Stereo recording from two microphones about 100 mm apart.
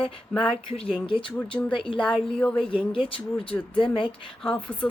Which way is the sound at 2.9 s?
65° left (ahead or behind).